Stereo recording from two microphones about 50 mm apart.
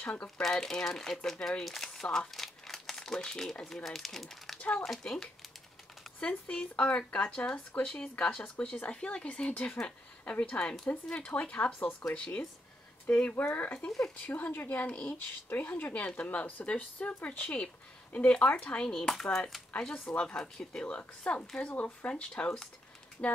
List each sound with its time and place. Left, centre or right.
0.0 s speech: left
0.4 s speech: centre
6.1 s speech: left
13.7 s speech: centre
14.2 s speech: left
14.8 s speech: left
18.9 s speech: centre; by 23.3 s left